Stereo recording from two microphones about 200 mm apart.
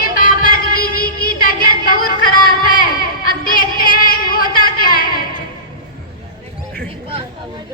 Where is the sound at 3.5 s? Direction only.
45° left (ahead or behind).